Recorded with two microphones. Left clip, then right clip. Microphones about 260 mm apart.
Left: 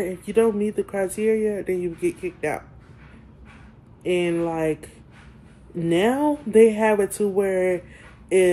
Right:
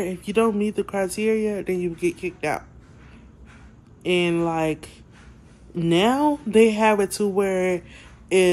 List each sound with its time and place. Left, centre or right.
0.0 s speech: centre
4.0 s speech: centre